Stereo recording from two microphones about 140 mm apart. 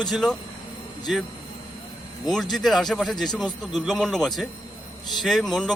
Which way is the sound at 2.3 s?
5° left (ahead or behind).